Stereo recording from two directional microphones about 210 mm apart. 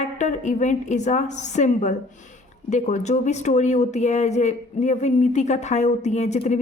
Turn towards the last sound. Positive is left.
turn(degrees=35)  # may be behind; listen again after turning